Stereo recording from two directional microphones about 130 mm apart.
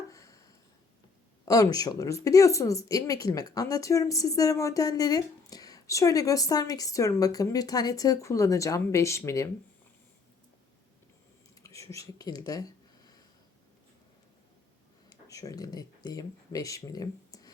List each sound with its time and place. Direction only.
0.1 s a sound: 25° left (ahead or behind)
1.5 s speech: 30° left (ahead or behind)
11.6 s speech: 25° left (ahead or behind)
15.1 s speech: 25° left (ahead or behind)